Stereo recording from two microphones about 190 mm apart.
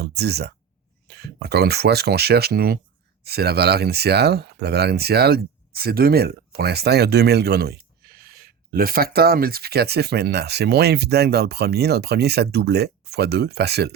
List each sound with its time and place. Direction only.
0.2 s speech: 60° right (ahead or behind)